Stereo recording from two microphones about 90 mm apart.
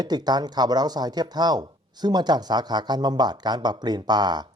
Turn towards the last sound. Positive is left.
turn(degrees=-50)  # may be behind; listen again after turning